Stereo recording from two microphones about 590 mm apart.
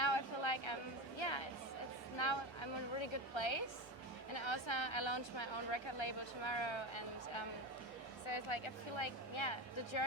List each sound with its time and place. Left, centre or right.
0.0 s a sound: left
1.2 s chatter: left
2.1 s a woman's voice: left